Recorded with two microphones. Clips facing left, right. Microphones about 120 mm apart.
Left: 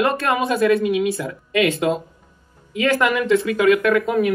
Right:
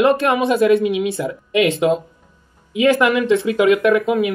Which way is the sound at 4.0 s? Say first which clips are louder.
Right 1 dB; centre (ahead or behind).